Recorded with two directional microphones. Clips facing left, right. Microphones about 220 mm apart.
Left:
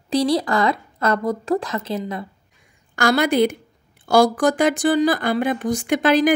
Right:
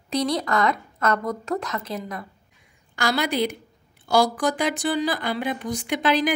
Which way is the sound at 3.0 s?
50° left (ahead or behind).